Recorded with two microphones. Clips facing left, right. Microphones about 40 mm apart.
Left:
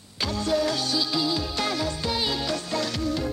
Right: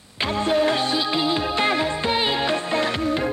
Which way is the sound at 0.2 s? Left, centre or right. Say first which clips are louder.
Right 5 dB; right.